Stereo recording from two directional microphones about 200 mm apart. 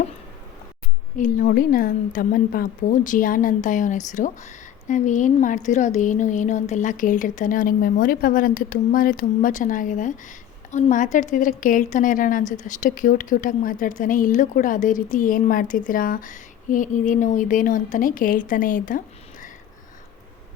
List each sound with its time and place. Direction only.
1.2 s a woman's voice: 40° left (ahead or behind)